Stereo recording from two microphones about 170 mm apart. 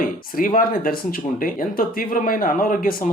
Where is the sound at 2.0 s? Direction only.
55° left (ahead or behind).